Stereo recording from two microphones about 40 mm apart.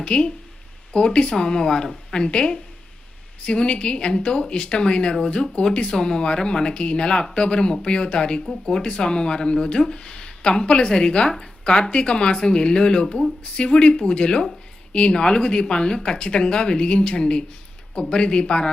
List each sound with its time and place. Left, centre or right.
0.0 s speech: left
5.9 s speech: centre